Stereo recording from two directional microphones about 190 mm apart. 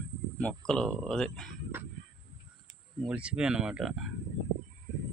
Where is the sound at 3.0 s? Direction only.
5° right (ahead or behind).